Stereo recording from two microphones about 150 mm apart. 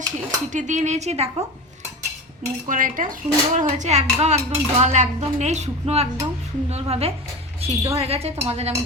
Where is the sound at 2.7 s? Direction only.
60° right (ahead or behind).